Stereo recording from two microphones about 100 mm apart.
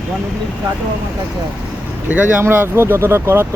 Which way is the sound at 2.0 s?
15° right (ahead or behind).